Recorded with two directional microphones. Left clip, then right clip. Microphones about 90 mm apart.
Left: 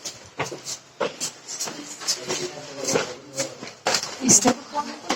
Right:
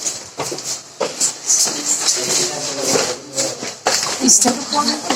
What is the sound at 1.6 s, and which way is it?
Music, 30° left (ahead or behind).